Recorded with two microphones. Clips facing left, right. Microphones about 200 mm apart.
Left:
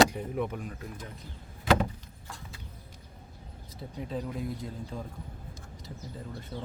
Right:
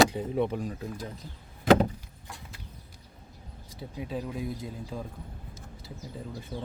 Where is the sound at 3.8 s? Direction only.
5° right (ahead or behind).